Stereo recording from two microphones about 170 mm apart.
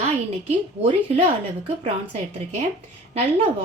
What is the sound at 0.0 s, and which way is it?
Speech, 35° right (ahead or behind).